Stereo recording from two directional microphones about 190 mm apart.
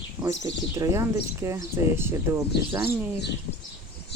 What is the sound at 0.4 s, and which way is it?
Speech, 15° right (ahead or behind).